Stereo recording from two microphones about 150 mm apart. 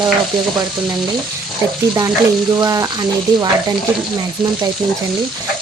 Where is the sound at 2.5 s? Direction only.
25° right (ahead or behind).